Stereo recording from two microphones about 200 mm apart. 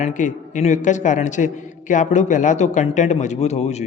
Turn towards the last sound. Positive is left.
turn(degrees=35)  # may be behind; listen again after turning